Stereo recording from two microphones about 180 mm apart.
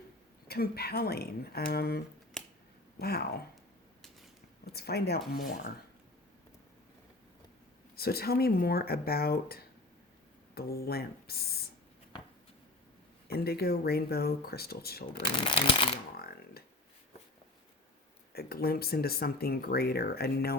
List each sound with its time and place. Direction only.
0.4 s speech: 60° left (ahead or behind)
3.0 s speech: 60° left (ahead or behind)
4.6 s speech: 60° left (ahead or behind)
7.9 s speech: 60° left (ahead or behind)
13.2 s speech: 60° left (ahead or behind)
15.2 s speech: 30° left (ahead or behind)
16.1 s computer keyboard: 60° left (ahead or behind)
18.3 s speech: 60° left (ahead or behind)